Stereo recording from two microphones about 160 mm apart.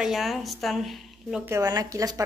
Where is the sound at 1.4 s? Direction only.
20° right (ahead or behind).